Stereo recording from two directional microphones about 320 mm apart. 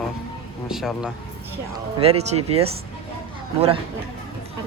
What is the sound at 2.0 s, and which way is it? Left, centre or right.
Speech, centre.